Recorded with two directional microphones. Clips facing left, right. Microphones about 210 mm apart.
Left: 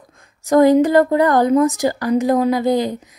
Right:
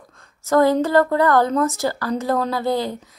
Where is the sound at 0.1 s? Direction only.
15° left (ahead or behind).